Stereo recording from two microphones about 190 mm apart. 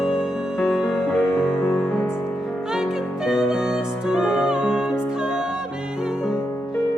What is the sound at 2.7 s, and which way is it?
Music, 5° right (ahead or behind).